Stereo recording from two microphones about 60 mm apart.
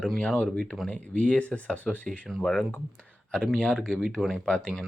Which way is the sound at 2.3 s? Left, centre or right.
Centre.